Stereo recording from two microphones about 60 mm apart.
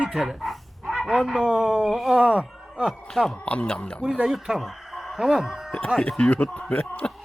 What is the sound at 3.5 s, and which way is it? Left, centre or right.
Speech, centre.